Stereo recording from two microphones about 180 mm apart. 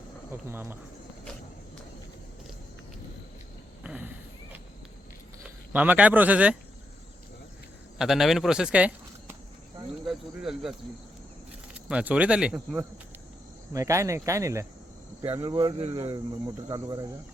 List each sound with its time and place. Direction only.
0.3 s speech: 10° right (ahead or behind)
3.8 s speech: 5° right (ahead or behind)
5.7 s speech: 10° right (ahead or behind)
7.9 s speech: centre (ahead or behind)
11.9 s speech: 5° right (ahead or behind); by 17.1 s 20° right (ahead or behind)